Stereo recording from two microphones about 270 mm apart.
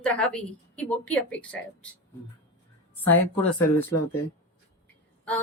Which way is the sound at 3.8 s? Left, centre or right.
Left.